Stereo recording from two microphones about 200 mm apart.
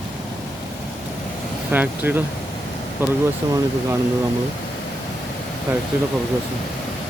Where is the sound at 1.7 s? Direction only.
10° right (ahead or behind).